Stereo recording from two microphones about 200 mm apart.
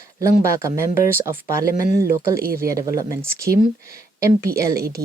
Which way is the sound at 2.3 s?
50° right (ahead or behind).